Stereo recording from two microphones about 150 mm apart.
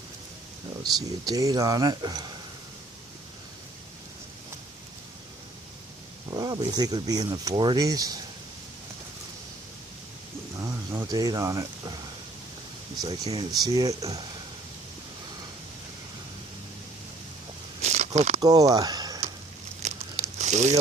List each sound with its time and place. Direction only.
0.8 s speech: 25° right (ahead or behind)
6.3 s speech: 25° right (ahead or behind)
10.6 s speech: 20° right (ahead or behind)
13.0 s speech: 25° right (ahead or behind)
17.7 s a sound: 50° right (ahead or behind)
18.3 s speech: 25° right (ahead or behind)
18.7 s a sound: 25° right (ahead or behind)
19.8 s crumpling: 50° right (ahead or behind)